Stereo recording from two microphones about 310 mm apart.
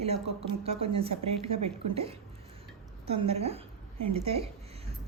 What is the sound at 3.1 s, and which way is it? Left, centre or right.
A woman's voice, centre.